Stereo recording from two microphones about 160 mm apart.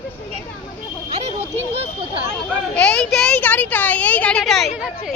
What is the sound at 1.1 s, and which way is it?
Speech, 40° right (ahead or behind).